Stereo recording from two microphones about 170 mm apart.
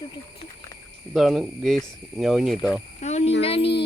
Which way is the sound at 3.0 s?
40° left (ahead or behind).